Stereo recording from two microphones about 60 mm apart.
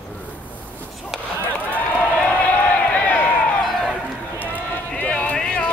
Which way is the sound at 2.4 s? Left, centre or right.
Left.